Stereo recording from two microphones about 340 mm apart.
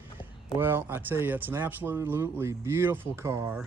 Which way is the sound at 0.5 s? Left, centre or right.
Centre.